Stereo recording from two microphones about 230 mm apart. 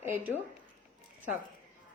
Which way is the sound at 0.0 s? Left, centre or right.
Centre.